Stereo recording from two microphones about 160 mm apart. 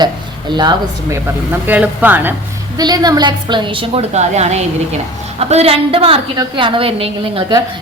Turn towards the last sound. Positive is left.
turn(degrees=-35)  # may be behind; listen again after turning